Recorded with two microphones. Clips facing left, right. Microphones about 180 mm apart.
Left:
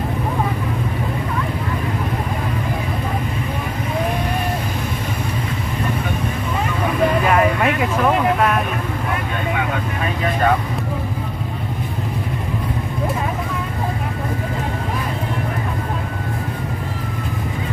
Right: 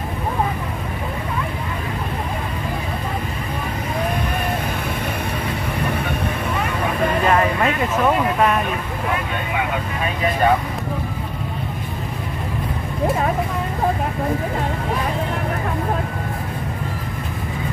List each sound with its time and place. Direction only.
7.2 s vehicle: 5° left (ahead or behind)